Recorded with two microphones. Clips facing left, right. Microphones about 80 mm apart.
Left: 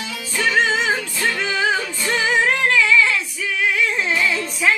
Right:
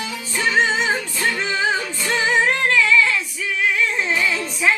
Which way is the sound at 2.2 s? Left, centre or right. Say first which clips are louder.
Even; centre.